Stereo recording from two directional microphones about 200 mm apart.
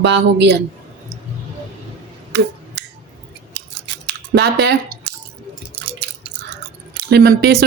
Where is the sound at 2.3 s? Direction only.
60° right (ahead or behind).